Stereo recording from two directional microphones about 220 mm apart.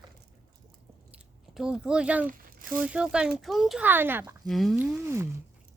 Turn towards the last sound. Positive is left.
turn(degrees=-10)  # may be behind; listen again after turning